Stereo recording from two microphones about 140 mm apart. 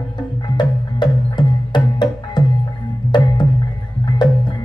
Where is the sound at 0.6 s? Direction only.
35° left (ahead or behind).